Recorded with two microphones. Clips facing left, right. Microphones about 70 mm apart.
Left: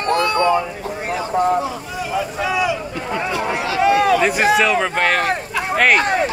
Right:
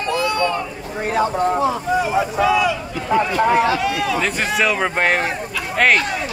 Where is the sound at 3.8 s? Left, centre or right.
Left.